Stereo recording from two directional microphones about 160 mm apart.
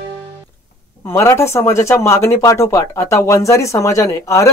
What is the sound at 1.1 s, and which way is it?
Speech, 15° left (ahead or behind).